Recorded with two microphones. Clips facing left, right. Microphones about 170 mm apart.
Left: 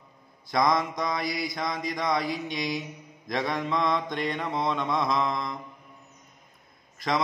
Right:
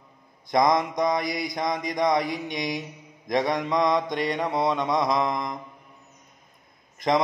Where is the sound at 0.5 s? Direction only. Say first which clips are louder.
Right 3 dB; 20° right (ahead or behind).